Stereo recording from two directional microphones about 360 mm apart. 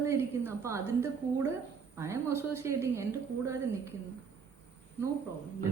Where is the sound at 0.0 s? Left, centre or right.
Centre.